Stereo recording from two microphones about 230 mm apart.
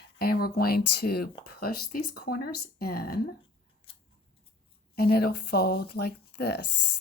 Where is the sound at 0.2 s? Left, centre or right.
Left.